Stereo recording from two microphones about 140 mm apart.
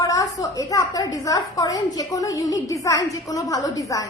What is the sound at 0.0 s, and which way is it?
A woman's voice, 25° left (ahead or behind).